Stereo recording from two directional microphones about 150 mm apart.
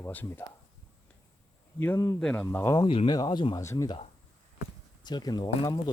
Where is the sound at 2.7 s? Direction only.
35° left (ahead or behind).